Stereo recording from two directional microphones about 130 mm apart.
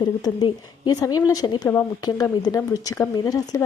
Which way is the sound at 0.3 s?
30° left (ahead or behind).